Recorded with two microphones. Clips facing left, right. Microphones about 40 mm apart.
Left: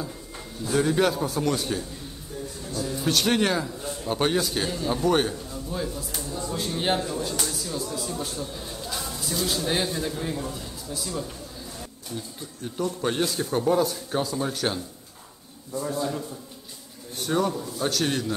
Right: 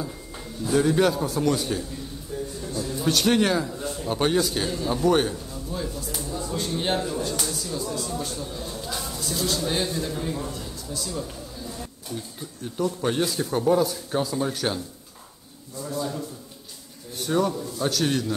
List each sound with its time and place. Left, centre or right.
0.7 s a man's voice: centre
2.3 s a sound: centre
2.8 s a man's voice: centre
10.4 s a sound: centre
12.6 s a man's voice: centre
15.7 s a man's voice: left
16.0 s a man's voice: centre